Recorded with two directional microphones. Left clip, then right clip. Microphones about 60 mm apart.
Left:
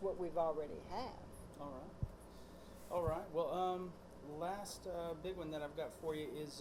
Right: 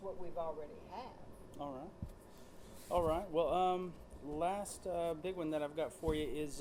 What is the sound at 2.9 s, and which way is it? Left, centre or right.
Speech, right.